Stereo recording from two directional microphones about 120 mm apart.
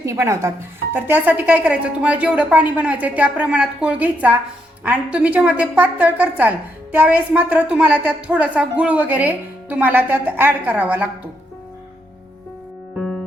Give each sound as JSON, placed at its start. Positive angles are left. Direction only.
{"t": 0.0, "sound": "a woman's voice", "side_deg": -25}
{"t": 13.0, "sound": "music", "side_deg": 5}